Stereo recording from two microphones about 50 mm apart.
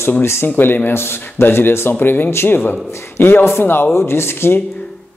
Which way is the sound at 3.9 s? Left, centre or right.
Left.